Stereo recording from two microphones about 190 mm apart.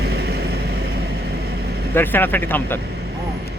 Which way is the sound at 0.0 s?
60° right (ahead or behind).